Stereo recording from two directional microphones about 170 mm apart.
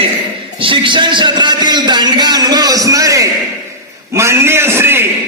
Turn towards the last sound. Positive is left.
turn(degrees=-15)  # may be behind; listen again after turning